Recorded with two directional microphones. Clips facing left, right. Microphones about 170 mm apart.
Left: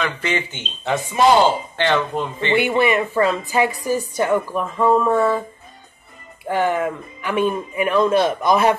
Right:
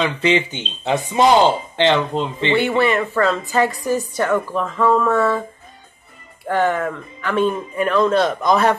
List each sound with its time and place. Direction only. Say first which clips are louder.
0.0 s speech: right 5 dB; 20° right (ahead or behind)
2.5 s a woman's voice: even; 15° left (ahead or behind)
6.4 s a woman's voice: right 1 dB; 10° left (ahead or behind)